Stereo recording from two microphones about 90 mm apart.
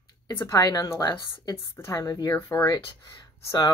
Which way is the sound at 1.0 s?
50° left (ahead or behind).